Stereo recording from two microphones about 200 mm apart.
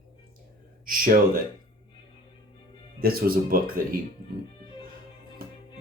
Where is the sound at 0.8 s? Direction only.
45° right (ahead or behind).